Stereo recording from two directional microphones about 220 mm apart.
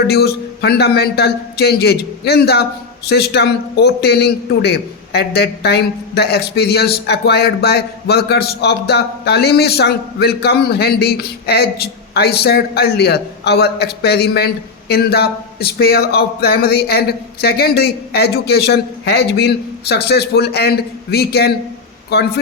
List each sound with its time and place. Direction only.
0.1 s a man's voice: 45° left (ahead or behind)